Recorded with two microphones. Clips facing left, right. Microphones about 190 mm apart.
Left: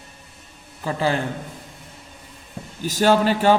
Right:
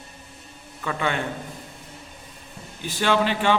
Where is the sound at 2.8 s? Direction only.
40° left (ahead or behind).